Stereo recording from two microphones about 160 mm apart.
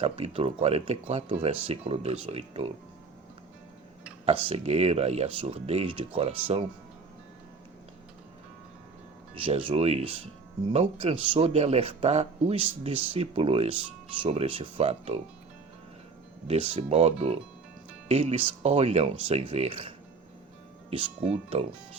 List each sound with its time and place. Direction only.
0.0 s speech: 40° right (ahead or behind)
4.3 s speech: 40° right (ahead or behind)
9.4 s speech: 35° right (ahead or behind)
16.5 s speech: 35° right (ahead or behind)